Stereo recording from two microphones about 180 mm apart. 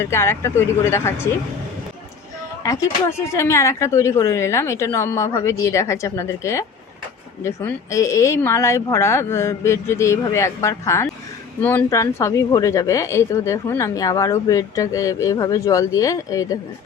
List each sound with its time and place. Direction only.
0.0 s a woman's voice: 15° left (ahead or behind)
2.6 s a woman's voice: 15° left (ahead or behind)